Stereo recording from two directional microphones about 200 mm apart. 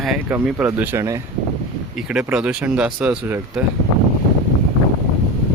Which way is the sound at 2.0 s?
5° right (ahead or behind).